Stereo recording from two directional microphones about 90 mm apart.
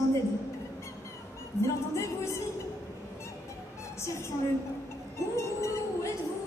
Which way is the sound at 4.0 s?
30° left (ahead or behind).